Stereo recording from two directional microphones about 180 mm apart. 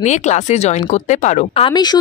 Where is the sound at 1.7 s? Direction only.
25° left (ahead or behind).